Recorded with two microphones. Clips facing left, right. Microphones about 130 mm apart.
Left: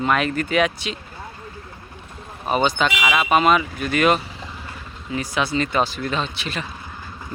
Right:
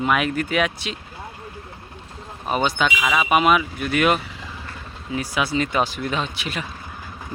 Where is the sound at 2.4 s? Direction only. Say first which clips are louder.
Left 2 dB; centre (ahead or behind).